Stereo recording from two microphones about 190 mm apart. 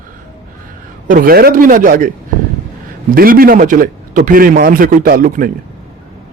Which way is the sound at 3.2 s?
50° right (ahead or behind).